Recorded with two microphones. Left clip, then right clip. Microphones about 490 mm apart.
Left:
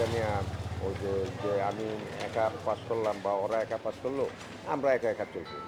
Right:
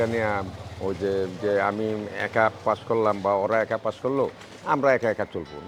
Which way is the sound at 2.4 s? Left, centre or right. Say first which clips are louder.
Right 8 dB; right.